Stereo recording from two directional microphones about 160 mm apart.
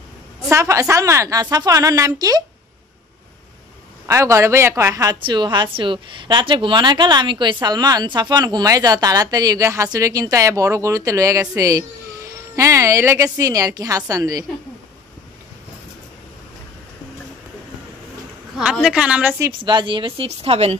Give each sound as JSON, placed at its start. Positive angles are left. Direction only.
{"t": 0.5, "sound": "a woman's voice", "side_deg": -20}
{"t": 4.1, "sound": "a woman's voice", "side_deg": -20}
{"t": 18.6, "sound": "a woman's voice", "side_deg": -5}
{"t": 19.4, "sound": "a woman's voice", "side_deg": -30}